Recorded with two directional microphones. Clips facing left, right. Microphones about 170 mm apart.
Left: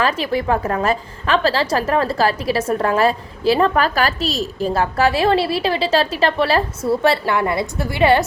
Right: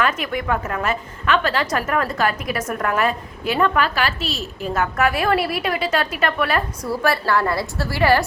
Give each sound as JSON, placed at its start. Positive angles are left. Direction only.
{"t": 0.0, "sound": "a woman's voice", "side_deg": 30}